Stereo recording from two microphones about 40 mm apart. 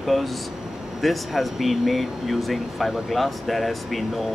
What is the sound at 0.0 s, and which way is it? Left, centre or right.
Speech, centre.